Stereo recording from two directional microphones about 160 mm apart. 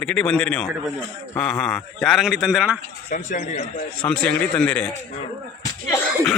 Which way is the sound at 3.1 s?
60° left (ahead or behind).